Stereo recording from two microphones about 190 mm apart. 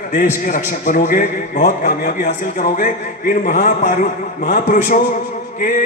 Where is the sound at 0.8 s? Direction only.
45° left (ahead or behind).